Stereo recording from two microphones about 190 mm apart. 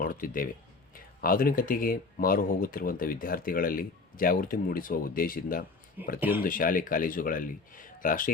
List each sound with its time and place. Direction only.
0.0 s speech: 45° left (ahead or behind)
6.1 s speech: 10° right (ahead or behind)
6.4 s speech: 45° left (ahead or behind)